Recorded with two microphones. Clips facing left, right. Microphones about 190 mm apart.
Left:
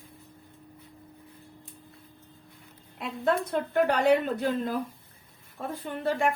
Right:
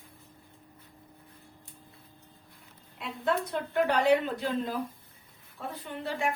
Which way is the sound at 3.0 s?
50° left (ahead or behind).